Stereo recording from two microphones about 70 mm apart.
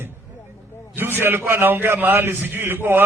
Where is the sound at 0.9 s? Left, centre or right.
Right.